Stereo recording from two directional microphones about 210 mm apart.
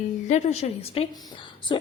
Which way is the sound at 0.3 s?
35° left (ahead or behind).